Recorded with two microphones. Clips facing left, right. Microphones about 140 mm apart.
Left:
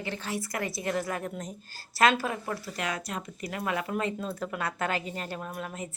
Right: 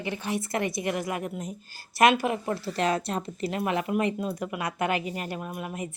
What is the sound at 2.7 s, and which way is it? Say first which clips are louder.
A woman's voice: right 7 dB; 30° right (ahead or behind).